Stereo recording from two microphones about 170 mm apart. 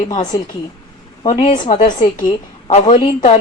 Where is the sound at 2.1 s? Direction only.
25° left (ahead or behind).